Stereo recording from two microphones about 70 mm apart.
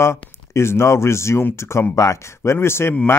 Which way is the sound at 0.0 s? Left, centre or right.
Left.